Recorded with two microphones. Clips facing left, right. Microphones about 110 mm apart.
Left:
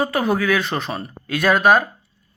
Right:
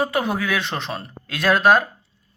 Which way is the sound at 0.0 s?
Centre (ahead or behind).